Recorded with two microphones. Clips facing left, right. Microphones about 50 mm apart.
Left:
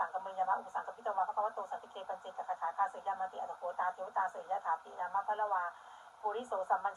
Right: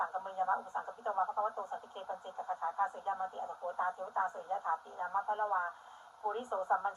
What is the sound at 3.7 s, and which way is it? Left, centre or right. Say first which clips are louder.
Speech: even; left.